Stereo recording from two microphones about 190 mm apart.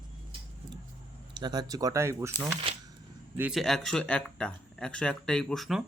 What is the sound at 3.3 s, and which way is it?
Speech, 5° right (ahead or behind).